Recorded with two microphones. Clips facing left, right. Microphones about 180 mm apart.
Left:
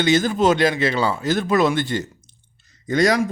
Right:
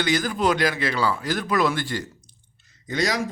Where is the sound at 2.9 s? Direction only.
55° left (ahead or behind).